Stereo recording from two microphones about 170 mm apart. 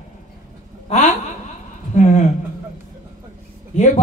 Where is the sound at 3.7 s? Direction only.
45° left (ahead or behind).